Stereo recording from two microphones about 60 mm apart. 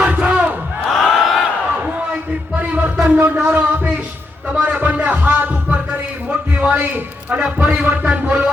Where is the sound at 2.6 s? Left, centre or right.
Right.